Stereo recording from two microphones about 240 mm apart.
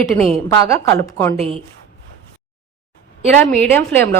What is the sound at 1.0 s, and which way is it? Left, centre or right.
Speech, centre.